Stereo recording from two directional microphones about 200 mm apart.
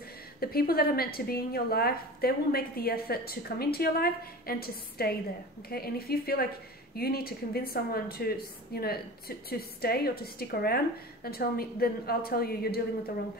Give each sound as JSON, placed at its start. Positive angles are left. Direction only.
{"t": 0.4, "sound": "a woman's voice", "side_deg": 50}